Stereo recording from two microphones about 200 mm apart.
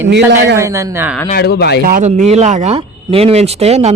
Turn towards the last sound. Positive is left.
turn(degrees=-30)  # may be behind; listen again after turning